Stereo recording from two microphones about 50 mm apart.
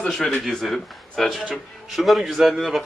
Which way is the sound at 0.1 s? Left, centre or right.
Centre.